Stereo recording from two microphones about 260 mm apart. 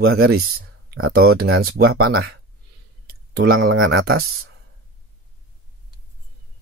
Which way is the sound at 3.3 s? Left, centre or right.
Right.